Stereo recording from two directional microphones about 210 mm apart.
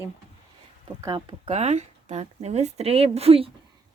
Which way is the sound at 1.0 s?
20° right (ahead or behind).